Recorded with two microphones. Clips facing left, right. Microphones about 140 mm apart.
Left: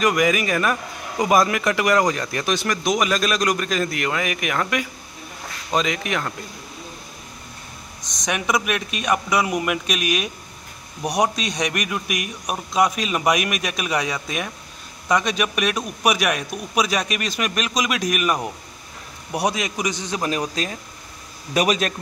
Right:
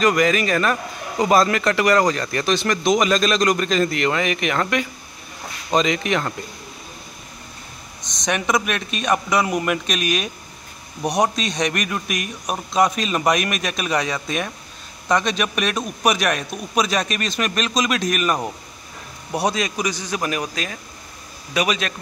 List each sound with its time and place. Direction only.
0.0 s speech: 10° left (ahead or behind)
8.3 s a man's voice: 5° left (ahead or behind); by 20.7 s 30° left (ahead or behind)
21.5 s a man's voice: 45° left (ahead or behind)